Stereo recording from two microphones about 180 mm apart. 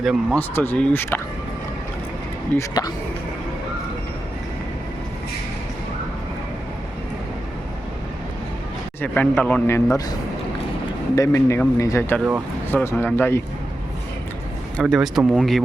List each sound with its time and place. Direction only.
0.0 s speech: 5° right (ahead or behind)
0.3 s a man's voice: 10° left (ahead or behind)
2.6 s speech: 20° left (ahead or behind)
9.0 s a man's voice: 10° left (ahead or behind)
14.8 s speech: centre (ahead or behind)